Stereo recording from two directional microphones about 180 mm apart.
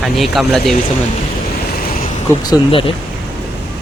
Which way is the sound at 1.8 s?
55° left (ahead or behind).